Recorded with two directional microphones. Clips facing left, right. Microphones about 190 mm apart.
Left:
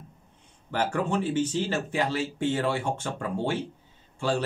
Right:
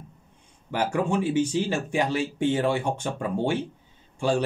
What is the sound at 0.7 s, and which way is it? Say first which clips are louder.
Speech: right 2 dB; 15° right (ahead or behind).